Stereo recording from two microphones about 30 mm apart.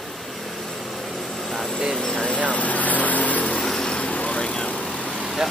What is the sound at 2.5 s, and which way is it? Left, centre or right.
Vehicle, left.